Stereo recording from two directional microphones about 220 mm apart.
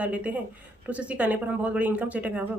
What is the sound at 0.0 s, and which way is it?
Speech, 5° right (ahead or behind).